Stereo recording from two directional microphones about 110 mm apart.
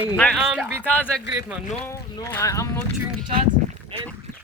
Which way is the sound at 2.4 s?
30° left (ahead or behind).